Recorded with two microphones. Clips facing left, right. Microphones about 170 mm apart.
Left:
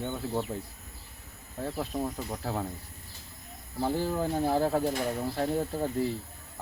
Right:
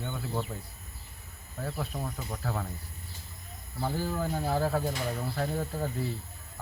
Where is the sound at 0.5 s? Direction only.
20° left (ahead or behind).